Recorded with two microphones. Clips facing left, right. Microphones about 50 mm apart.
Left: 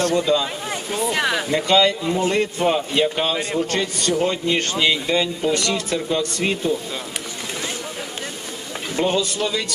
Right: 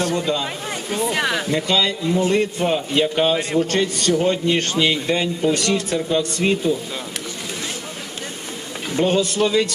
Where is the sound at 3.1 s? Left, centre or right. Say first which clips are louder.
Right 4 dB; centre.